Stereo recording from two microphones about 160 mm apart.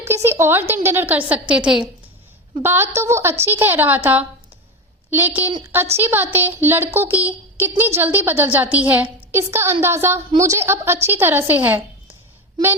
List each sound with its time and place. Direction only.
0.0 s a woman's voice: 15° right (ahead or behind)